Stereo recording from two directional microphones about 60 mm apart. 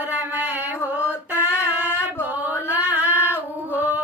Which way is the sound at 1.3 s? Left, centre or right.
Left.